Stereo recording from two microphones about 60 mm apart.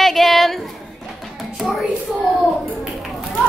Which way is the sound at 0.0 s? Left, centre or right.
Centre.